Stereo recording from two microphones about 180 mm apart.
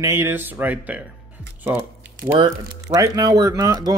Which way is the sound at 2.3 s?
20° right (ahead or behind).